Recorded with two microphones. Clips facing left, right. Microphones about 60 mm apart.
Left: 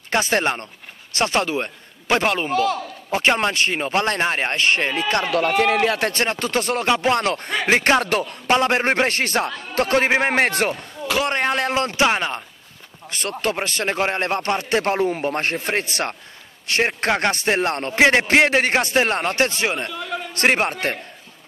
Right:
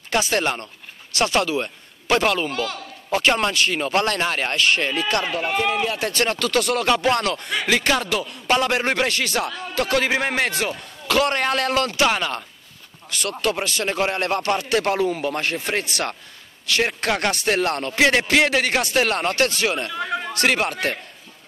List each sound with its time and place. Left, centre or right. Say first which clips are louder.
0.1 s a man's voice: left 1 dB; left
5.2 s speech: left 4 dB; left
6.2 s a man's voice: right 1 dB; left
8.0 s speech: left 3 dB; left
8.5 s speech: left 2 dB; left
11.1 s a man's voice: right 1 dB; centre; by 21.0 s left